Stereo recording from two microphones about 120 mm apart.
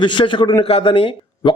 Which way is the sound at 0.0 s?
40° left (ahead or behind).